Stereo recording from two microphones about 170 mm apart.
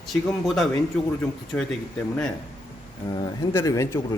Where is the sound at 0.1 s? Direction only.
Centre (ahead or behind).